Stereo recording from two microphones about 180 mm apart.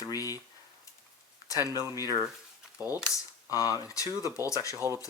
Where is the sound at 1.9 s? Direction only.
20° left (ahead or behind).